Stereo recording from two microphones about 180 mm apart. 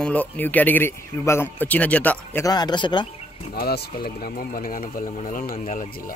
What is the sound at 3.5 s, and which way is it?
Speech, 60° left (ahead or behind).